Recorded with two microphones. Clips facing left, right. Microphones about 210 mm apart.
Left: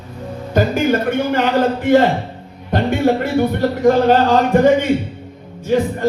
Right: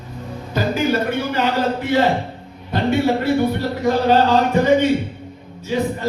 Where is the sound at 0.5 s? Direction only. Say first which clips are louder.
Left 3 dB; 50° left (ahead or behind).